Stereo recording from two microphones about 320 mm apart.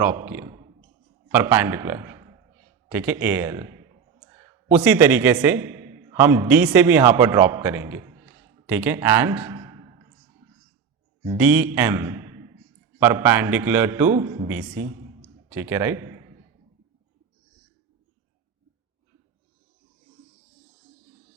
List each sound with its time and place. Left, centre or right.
0.0 s a man's voice: centre
8.2 s a sound: centre
8.7 s speech: centre
11.2 s a man's voice: centre